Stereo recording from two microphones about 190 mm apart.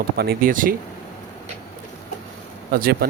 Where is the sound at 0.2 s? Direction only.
50° right (ahead or behind).